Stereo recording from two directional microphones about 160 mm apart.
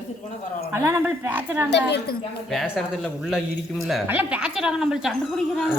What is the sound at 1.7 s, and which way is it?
Speech, 90° left.